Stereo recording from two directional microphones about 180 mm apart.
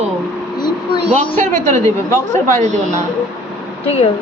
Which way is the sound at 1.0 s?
35° right (ahead or behind).